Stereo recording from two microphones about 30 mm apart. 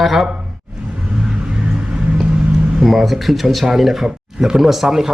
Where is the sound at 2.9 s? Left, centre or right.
Centre.